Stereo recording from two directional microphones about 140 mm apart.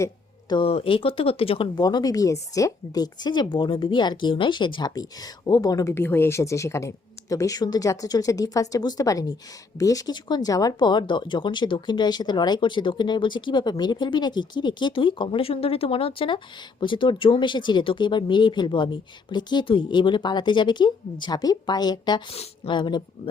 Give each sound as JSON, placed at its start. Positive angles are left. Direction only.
{"t": 0.0, "sound": "a sound", "side_deg": 30}
{"t": 0.7, "sound": "speech", "side_deg": 40}
{"t": 1.8, "sound": "speech", "side_deg": 30}
{"t": 22.3, "sound": "speech", "side_deg": 40}